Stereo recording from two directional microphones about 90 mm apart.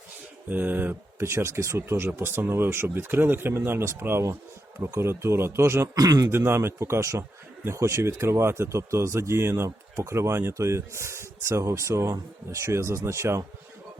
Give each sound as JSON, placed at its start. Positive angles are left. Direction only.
{"t": 0.4, "sound": "a man's voice", "side_deg": -20}
{"t": 5.9, "sound": "a man's voice", "side_deg": -40}
{"t": 6.3, "sound": "a man's voice", "side_deg": -25}